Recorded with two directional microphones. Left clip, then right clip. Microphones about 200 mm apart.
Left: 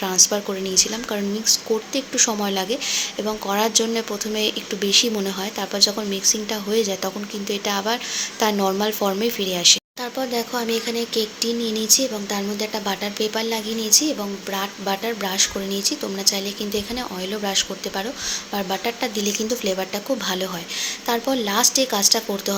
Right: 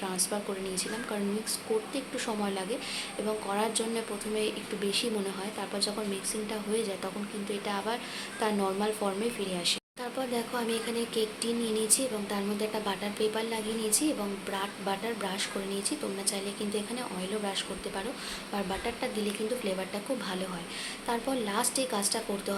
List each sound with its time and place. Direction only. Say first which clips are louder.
0.0 s a woman's voice: left 14 dB; 30° left (ahead or behind)